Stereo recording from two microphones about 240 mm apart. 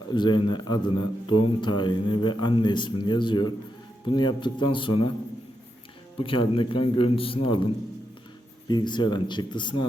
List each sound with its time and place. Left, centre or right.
0.1 s a man's voice: centre
6.1 s speech: left